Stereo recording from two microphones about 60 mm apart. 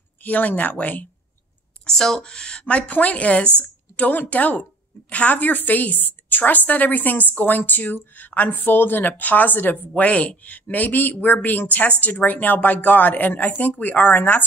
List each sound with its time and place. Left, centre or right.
0.2 s speech: left
1.9 s speech: centre; by 14.4 s left